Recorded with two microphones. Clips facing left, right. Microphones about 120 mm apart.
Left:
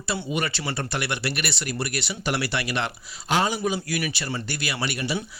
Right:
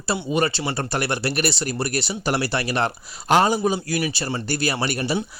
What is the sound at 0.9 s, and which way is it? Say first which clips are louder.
Speech: right 7 dB; 40° right (ahead or behind).